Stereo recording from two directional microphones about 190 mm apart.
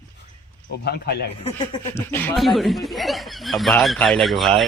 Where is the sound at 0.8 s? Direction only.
60° left (ahead or behind).